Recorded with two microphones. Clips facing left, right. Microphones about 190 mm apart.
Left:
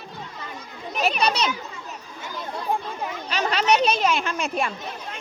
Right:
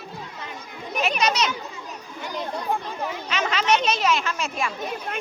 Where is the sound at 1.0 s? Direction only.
30° left (ahead or behind).